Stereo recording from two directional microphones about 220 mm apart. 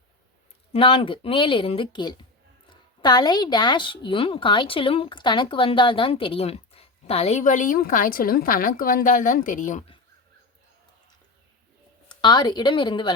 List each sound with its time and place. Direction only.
0.7 s a woman's voice: 25° left (ahead or behind)
12.2 s a woman's voice: 20° left (ahead or behind)